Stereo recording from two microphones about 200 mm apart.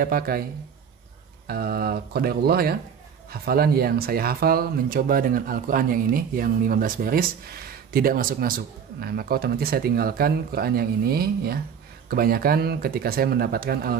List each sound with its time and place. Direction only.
0.0 s speech: 45° right (ahead or behind)
1.5 s speech: 50° right (ahead or behind)